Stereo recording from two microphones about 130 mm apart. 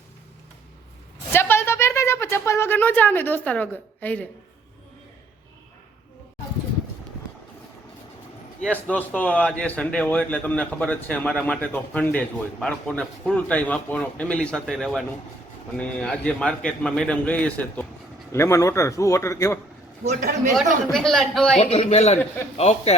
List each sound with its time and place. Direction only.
1.3 s a sound: 20° left (ahead or behind)
8.6 s a man's voice: 10° left (ahead or behind)
18.3 s a man's voice: 20° left (ahead or behind)
20.2 s a man's voice: 75° right (ahead or behind)
20.9 s a man's voice: 5° left (ahead or behind)
21.6 s a man's voice: 55° left (ahead or behind)